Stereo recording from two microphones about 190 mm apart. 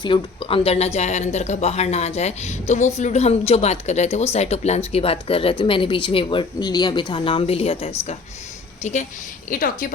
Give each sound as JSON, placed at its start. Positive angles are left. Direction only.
{"t": 0.0, "sound": "a woman's voice", "side_deg": 25}